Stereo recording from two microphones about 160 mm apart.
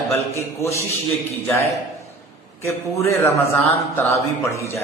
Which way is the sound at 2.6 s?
15° left (ahead or behind).